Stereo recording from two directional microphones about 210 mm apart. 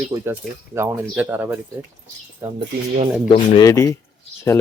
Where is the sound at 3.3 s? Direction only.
20° left (ahead or behind).